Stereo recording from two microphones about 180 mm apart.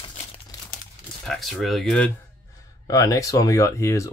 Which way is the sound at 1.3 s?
Centre (ahead or behind).